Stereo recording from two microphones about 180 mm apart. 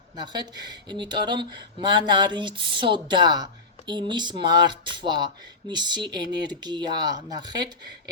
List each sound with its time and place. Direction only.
0.2 s speech: 25° right (ahead or behind)